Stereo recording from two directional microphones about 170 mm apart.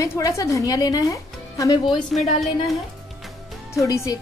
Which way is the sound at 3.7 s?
20° left (ahead or behind).